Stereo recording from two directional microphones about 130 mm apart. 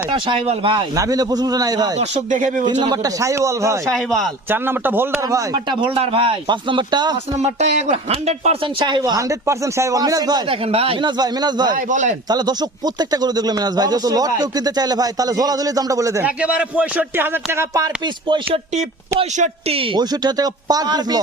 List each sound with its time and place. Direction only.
0.1 s a man's voice: 45° right (ahead or behind)
0.9 s speech: 30° right (ahead or behind)
2.0 s speech: 80° right
2.8 s speech: 30° right (ahead or behind)
3.9 s a man's voice: centre (ahead or behind)
4.4 s a man's voice: 15° right (ahead or behind); by 7.2 s 35° right (ahead or behind)
7.3 s speech: 60° right (ahead or behind)
8.8 s speech: 35° right (ahead or behind)
10.5 s a man's voice: 45° right (ahead or behind)
11.7 s a man's voice: 80° right
12.3 s speech: 30° right (ahead or behind)
16.2 s speech: 10° right (ahead or behind); by 18.6 s 40° right (ahead or behind)
19.2 s a man's voice: 50° right (ahead or behind); by 21.2 s 30° right (ahead or behind)